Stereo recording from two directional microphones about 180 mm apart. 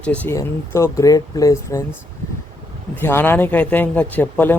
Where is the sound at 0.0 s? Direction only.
5° left (ahead or behind).